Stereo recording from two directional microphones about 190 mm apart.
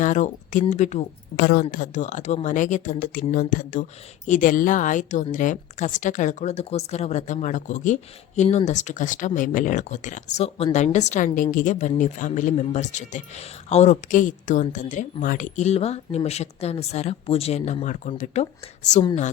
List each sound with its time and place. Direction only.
0.0 s speech: 45° left (ahead or behind)